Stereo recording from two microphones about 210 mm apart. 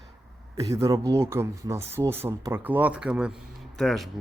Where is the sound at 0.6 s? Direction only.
15° right (ahead or behind).